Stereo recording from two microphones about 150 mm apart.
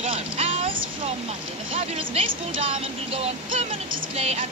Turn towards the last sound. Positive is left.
turn(degrees=-45)  # may be behind; listen again after turning